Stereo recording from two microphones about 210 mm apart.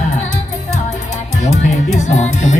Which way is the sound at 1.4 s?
35° left (ahead or behind).